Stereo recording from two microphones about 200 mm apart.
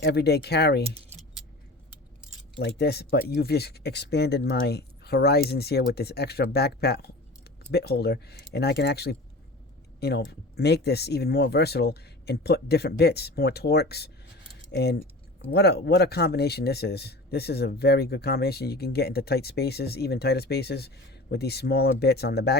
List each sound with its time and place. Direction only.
0.0 s speech: 55° left (ahead or behind)
2.6 s speech: 55° left (ahead or behind)